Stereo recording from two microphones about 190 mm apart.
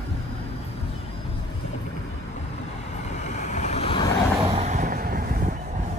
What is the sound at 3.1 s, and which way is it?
Vehicle, 35° left (ahead or behind).